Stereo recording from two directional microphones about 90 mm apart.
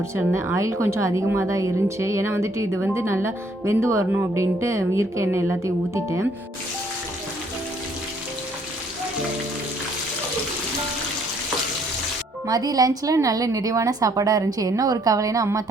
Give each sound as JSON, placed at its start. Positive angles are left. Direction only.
{"t": 0.3, "sound": "a woman's voice", "side_deg": -30}
{"t": 12.5, "sound": "a woman's voice", "side_deg": -45}